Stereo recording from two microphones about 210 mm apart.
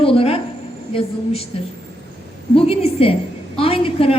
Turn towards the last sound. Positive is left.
turn(degrees=25)  # may be behind; listen again after turning